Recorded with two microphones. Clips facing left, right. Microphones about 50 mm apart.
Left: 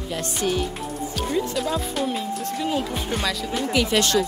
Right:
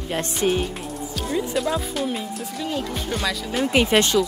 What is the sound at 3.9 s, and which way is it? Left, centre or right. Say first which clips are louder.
Speech: right 1 dB; centre.